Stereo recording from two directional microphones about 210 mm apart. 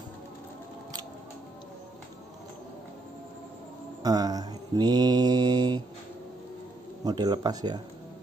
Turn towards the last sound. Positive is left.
turn(degrees=-20)  # may be behind; listen again after turning